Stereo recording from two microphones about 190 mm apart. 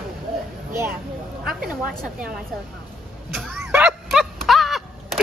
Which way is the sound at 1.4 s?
5° right (ahead or behind).